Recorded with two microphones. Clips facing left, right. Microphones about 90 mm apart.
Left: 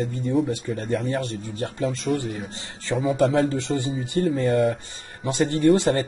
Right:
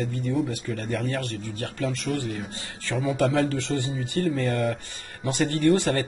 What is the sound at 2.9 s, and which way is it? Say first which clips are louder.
Music: left 3 dB; 5° left (ahead or behind).